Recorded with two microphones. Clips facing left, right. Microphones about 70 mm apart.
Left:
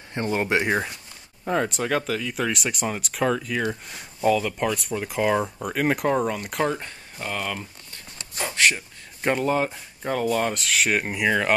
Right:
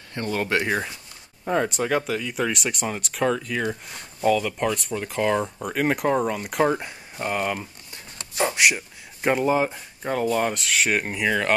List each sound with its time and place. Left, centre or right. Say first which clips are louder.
0.1 s speech: left 1 dB; left
1.4 s speech: right 1 dB; centre
6.7 s a sound: right 4 dB; centre
8.6 s speech: right 1 dB; centre